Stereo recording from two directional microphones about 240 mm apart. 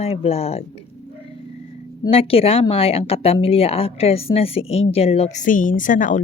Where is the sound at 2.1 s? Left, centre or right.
Left.